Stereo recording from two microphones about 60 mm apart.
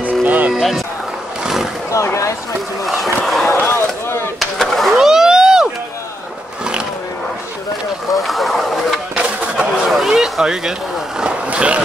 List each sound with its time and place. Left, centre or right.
0.0 s music: right
0.5 s speech: centre
1.4 s roaring cats: centre
2.8 s speech: centre
3.4 s chop: left
4.4 s vehicle: centre
8.1 s a sound: centre
11.1 s vehicle: centre